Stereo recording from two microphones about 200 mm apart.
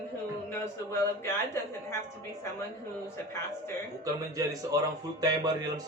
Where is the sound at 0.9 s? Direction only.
15° left (ahead or behind).